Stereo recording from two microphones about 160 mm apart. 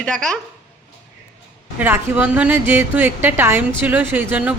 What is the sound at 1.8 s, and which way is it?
A woman's voice, 10° right (ahead or behind).